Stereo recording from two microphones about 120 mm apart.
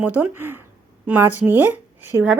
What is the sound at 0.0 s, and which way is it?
Speech, 15° right (ahead or behind).